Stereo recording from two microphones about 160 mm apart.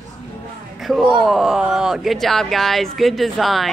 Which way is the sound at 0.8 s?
Centre (ahead or behind).